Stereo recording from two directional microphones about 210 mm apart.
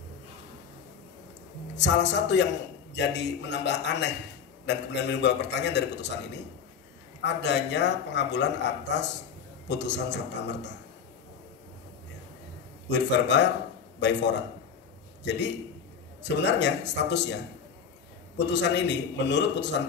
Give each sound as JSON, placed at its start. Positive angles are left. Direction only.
{"t": 1.8, "sound": "a man's voice", "side_deg": 55}
{"t": 7.2, "sound": "a man's voice", "side_deg": 55}
{"t": 12.8, "sound": "a man's voice", "side_deg": 55}
{"t": 18.5, "sound": "a man's voice", "side_deg": 55}